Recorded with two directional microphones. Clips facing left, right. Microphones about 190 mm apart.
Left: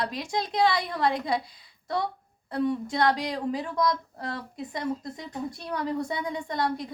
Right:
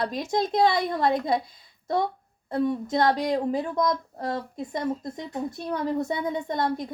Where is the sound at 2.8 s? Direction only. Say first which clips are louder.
Right 2 dB; 20° right (ahead or behind).